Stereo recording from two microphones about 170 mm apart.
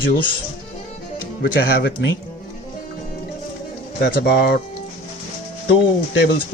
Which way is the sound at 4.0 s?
70° left (ahead or behind).